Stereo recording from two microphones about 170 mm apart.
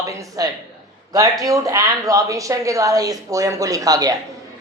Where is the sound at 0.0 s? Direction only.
20° right (ahead or behind).